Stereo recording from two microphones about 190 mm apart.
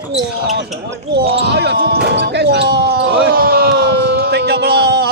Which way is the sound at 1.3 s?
60° right (ahead or behind).